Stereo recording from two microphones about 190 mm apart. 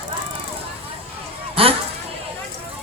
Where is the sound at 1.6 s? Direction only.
30° right (ahead or behind).